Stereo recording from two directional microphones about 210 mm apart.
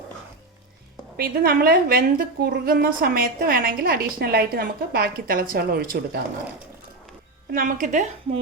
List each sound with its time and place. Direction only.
1.1 s a woman's voice: 45° right (ahead or behind)
7.5 s speech: 40° right (ahead or behind)